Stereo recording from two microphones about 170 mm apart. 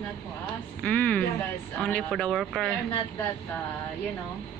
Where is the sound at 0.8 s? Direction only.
5° left (ahead or behind).